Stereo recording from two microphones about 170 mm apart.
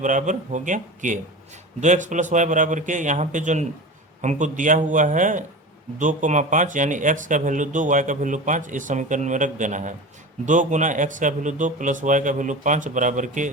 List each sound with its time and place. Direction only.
0.0 s speech: 50° right (ahead or behind)